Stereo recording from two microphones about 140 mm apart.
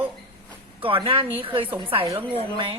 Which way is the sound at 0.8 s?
40° right (ahead or behind).